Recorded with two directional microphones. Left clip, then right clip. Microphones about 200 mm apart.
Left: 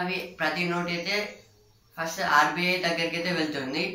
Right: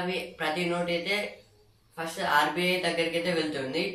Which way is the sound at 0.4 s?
Centre (ahead or behind).